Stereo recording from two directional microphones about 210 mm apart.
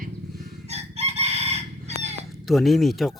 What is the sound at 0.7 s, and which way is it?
Chicken, 30° right (ahead or behind).